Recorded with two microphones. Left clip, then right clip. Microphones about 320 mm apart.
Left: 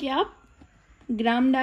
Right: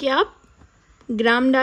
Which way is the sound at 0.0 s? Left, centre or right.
Right.